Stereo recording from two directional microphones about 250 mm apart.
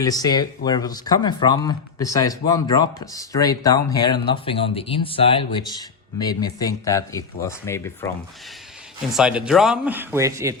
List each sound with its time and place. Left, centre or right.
0.0 s speech: centre
9.1 s speech: centre